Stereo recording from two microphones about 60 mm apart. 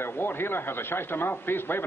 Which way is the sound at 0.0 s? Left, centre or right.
Left.